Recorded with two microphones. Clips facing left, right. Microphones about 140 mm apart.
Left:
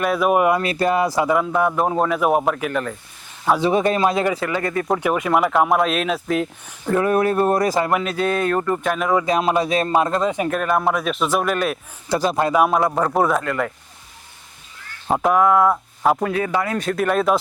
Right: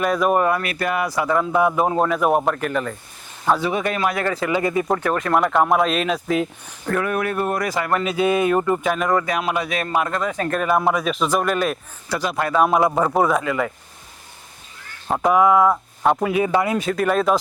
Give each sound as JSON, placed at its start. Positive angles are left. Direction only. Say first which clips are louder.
{"t": 0.0, "sound": "speech", "louder": "left 1 dB", "side_deg": 5}
{"t": 0.6, "sound": "speech", "louder": "left 4 dB", "side_deg": 30}
{"t": 1.5, "sound": "speech", "louder": "right 1 dB", "side_deg": -5}
{"t": 3.6, "sound": "speech", "louder": "left 4 dB", "side_deg": 30}
{"t": 4.5, "sound": "speech", "louder": "right 2 dB", "side_deg": -10}
{"t": 4.9, "sound": "speech", "louder": "left 1 dB", "side_deg": 10}
{"t": 7.0, "sound": "speech", "louder": "left 6 dB", "side_deg": 30}
{"t": 7.9, "sound": "speech", "louder": "right 1 dB", "side_deg": 0}
{"t": 9.2, "sound": "speech", "louder": "left 4 dB", "side_deg": 30}
{"t": 10.5, "sound": "speech", "louder": "right 1 dB", "side_deg": 0}
{"t": 15.1, "sound": "speech", "louder": "even", "side_deg": 0}
{"t": 16.5, "sound": "speech", "louder": "right 3 dB", "side_deg": -20}
{"t": 16.7, "sound": "speech", "louder": "even", "side_deg": 0}